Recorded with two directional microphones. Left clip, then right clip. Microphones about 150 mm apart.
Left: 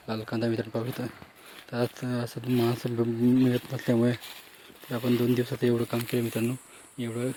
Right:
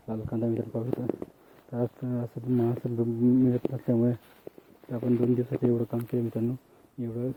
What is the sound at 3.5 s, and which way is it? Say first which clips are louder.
Speech: left 1 dB; 10° left (ahead or behind).